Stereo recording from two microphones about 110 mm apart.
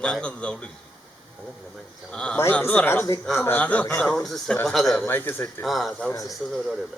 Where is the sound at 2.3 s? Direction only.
20° left (ahead or behind); by 5.1 s centre (ahead or behind).